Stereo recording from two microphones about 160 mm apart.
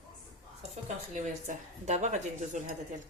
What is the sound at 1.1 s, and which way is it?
Speech, 45° right (ahead or behind).